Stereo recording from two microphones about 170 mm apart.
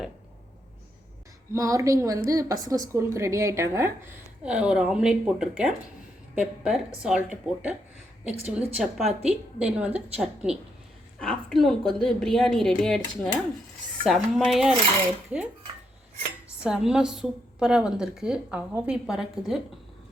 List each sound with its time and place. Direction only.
1.5 s a woman's voice: 20° right (ahead or behind)
4.4 s a woman's voice: 5° right (ahead or behind)
16.6 s a woman's voice: 5° right (ahead or behind)